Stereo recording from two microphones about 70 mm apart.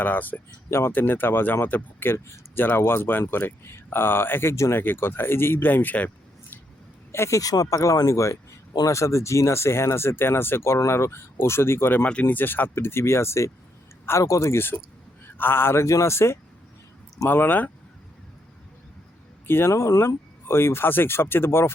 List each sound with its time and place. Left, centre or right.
0.0 s speech: left
0.7 s speech: left
2.6 s speech: left
7.1 s speech: left
12.0 s speech: centre; by 14.6 s left
15.4 s speech: left
17.2 s speech: left
19.5 s speech: left